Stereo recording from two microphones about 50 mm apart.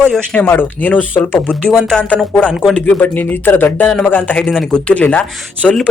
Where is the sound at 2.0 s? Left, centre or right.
Left.